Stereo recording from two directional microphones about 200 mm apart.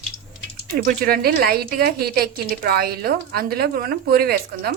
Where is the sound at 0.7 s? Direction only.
45° right (ahead or behind).